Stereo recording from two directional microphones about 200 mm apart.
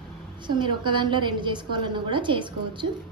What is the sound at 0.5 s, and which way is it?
A woman's voice, 25° right (ahead or behind).